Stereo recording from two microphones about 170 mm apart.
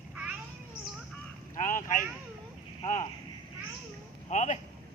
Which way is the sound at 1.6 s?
55° left (ahead or behind).